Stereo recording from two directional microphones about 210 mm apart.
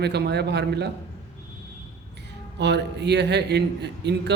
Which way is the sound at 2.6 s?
55° right (ahead or behind).